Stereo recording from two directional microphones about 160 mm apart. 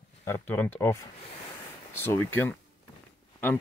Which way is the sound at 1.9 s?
15° left (ahead or behind).